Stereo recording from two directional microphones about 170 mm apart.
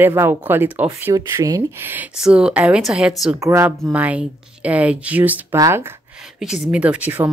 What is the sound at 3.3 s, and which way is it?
A woman's voice, 15° right (ahead or behind).